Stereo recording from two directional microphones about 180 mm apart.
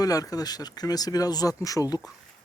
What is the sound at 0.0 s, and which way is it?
Speech, 20° left (ahead or behind).